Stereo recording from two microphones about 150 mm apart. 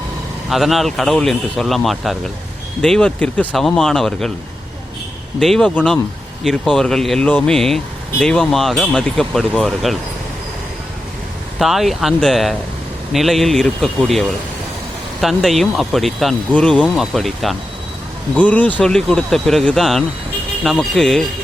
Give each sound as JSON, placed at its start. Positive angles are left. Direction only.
{"t": 0.5, "sound": "speech", "side_deg": 0}
{"t": 5.4, "sound": "speech", "side_deg": 5}
{"t": 11.6, "sound": "speech", "side_deg": 0}